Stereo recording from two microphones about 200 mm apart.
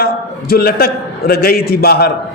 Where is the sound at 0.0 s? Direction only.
50° left (ahead or behind).